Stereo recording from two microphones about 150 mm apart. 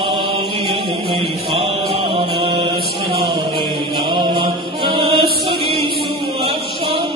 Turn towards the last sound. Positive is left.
turn(degrees=-35)  # may be behind; listen again after turning